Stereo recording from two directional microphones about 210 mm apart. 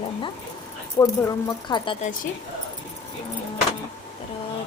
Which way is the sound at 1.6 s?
25° left (ahead or behind).